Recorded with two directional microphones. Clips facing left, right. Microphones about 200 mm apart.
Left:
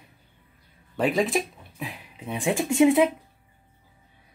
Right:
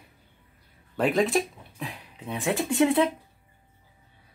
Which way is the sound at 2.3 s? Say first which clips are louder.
Left 2 dB; 15° left (ahead or behind).